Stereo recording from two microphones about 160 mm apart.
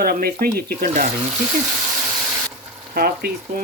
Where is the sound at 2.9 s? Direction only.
75° right (ahead or behind).